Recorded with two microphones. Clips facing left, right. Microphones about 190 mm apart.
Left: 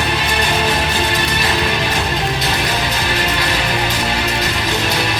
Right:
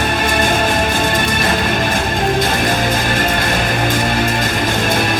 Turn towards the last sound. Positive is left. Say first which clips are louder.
# right 3 dB
turn(degrees=-50)  # may be behind; listen again after turning